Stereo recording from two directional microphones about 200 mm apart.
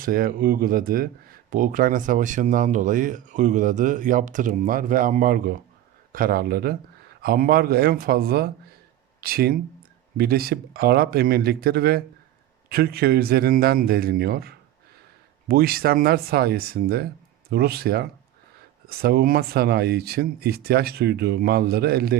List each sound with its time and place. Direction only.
0.0 s speech: 45° right (ahead or behind)